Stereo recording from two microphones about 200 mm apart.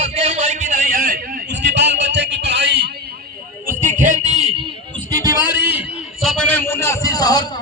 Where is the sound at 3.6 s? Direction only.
40° right (ahead or behind).